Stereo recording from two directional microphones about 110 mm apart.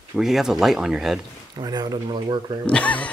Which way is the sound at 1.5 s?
35° right (ahead or behind).